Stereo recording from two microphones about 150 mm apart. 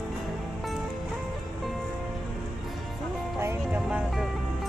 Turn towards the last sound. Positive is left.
turn(degrees=-10)  # may be behind; listen again after turning